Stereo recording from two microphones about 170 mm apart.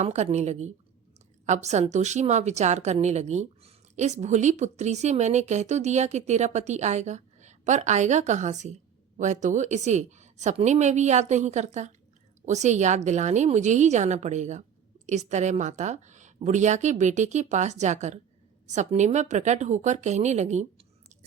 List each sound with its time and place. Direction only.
0.0 s a woman's voice: 40° right (ahead or behind)